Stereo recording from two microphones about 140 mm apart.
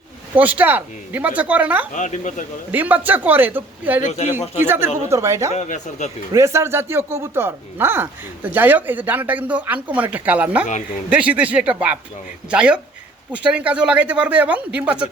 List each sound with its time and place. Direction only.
0.3 s speech: 10° right (ahead or behind)
2.0 s speech: 60° left (ahead or behind)
2.7 s speech: 10° right (ahead or behind)
5.5 s speech: 55° left (ahead or behind)
6.3 s speech: 20° right (ahead or behind)